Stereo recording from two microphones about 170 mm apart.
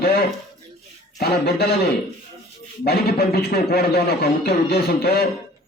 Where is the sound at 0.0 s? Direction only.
65° left (ahead or behind).